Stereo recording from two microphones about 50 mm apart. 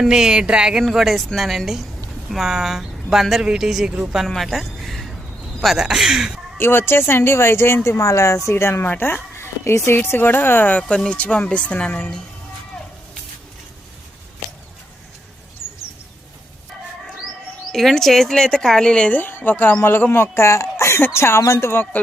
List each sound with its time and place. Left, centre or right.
0.0 s speech: centre
0.9 s a woman's voice: centre
4.4 s a sound: centre
5.7 s speech: centre
6.6 s speech: left
7.9 s speech: left
8.4 s speech: left
8.9 s speech: left
10.8 s speech: centre
11.2 s speech: left
17.7 s speech: centre
19.1 s speech: left
21.1 s speech: left
21.9 s speech: left